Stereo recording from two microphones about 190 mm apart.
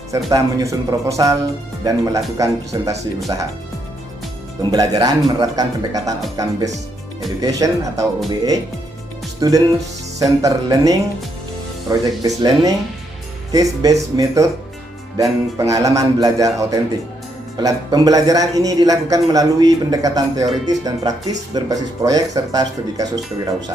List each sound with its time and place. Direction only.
0.3 s speech: 15° right (ahead or behind)
4.7 s speech: 20° right (ahead or behind)
9.4 s speech: 20° right (ahead or behind)